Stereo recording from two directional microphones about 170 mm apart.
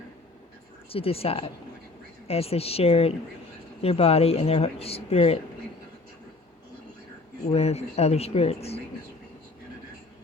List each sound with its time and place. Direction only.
0.9 s speech: 35° left (ahead or behind)
7.5 s speech: 40° left (ahead or behind)